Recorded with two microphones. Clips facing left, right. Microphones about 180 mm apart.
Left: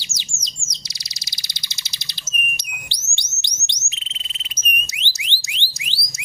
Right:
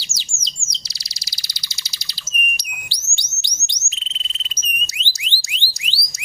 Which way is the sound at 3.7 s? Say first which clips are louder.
Right 1 dB; 20° left (ahead or behind).